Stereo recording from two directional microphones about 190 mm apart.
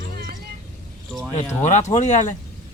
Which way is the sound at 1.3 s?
40° left (ahead or behind).